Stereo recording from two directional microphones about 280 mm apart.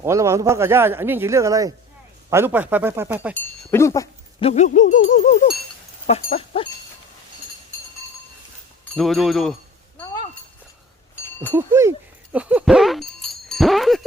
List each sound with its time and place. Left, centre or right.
0.0 s speech: centre
3.3 s speech: centre; by 5.5 s left
6.3 s goat: left
9.0 s speech: centre
11.5 s speech: centre